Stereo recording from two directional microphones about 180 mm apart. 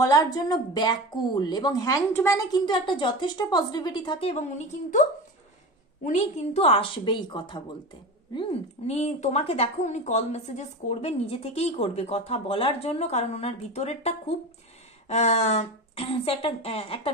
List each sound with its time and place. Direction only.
0.0 s a woman's voice: 20° left (ahead or behind)
6.0 s a woman's voice: 40° left (ahead or behind)